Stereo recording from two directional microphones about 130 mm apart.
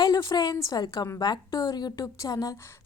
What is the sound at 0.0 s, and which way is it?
A woman's voice, 30° left (ahead or behind).